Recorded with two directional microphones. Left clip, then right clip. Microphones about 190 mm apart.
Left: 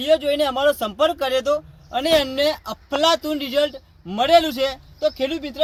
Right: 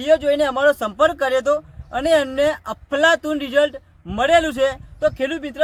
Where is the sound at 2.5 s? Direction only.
35° right (ahead or behind).